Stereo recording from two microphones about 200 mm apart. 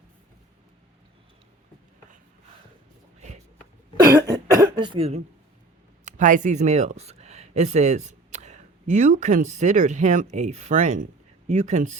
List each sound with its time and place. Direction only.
4.1 s cough: 15° right (ahead or behind)
6.1 s speech: 40° right (ahead or behind)